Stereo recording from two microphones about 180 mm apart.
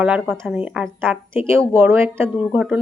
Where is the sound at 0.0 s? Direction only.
Centre (ahead or behind).